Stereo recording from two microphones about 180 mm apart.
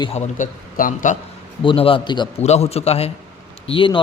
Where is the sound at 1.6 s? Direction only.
30° left (ahead or behind).